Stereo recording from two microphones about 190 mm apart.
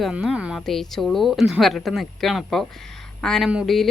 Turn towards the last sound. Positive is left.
turn(degrees=0)  # may be behind; listen again after turning